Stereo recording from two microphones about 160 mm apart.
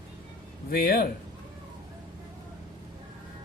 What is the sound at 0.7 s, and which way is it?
Speech, 65° left (ahead or behind).